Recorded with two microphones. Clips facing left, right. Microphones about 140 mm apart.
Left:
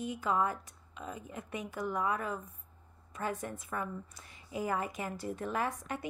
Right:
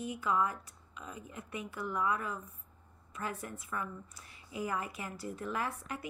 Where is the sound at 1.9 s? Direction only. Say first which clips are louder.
Even; 40° left (ahead or behind).